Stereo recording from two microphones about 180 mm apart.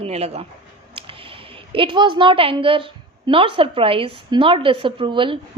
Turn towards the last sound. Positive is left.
turn(degrees=-30)  # may be behind; listen again after turning